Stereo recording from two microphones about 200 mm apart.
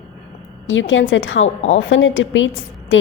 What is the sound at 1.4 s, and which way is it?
Speech, 35° left (ahead or behind).